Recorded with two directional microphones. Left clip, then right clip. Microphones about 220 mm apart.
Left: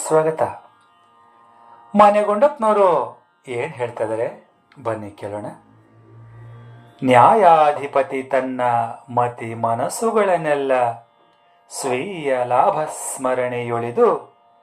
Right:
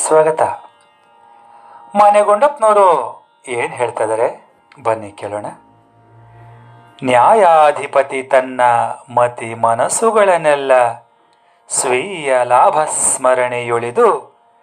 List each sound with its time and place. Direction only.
0.0 s speech: 50° right (ahead or behind)
1.9 s speech: 40° right (ahead or behind)
6.9 s speech: 50° right (ahead or behind)